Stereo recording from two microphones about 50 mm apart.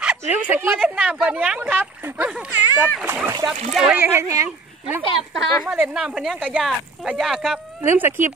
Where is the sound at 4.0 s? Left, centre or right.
Right.